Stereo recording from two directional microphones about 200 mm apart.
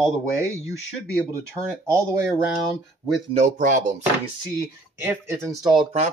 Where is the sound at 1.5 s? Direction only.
15° right (ahead or behind).